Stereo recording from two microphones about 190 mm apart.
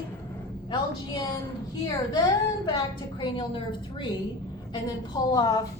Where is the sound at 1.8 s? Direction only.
20° left (ahead or behind).